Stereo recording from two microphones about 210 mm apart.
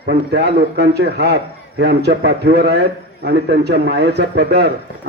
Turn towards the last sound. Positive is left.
turn(degrees=-55)  # may be behind; listen again after turning